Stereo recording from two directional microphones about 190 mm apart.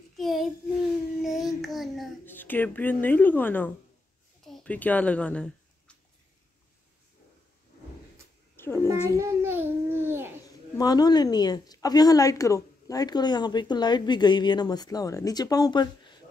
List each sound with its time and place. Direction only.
0.2 s child singing: centre (ahead or behind)
2.2 s speech: 10° left (ahead or behind)
4.5 s a sound: 5° left (ahead or behind)
8.5 s a sound: 10° left (ahead or behind)
9.1 s babbling: 15° right (ahead or behind)
10.8 s a woman's voice: 20° left (ahead or behind)